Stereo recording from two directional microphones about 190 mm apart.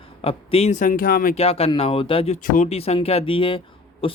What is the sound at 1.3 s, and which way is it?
Speech, 30° left (ahead or behind).